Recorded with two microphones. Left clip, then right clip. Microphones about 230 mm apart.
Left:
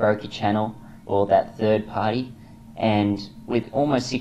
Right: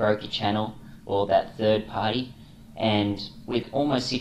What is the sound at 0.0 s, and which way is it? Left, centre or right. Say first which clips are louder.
Speech: left 3 dB; left.